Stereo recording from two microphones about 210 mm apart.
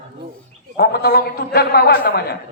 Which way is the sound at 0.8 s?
50° left (ahead or behind).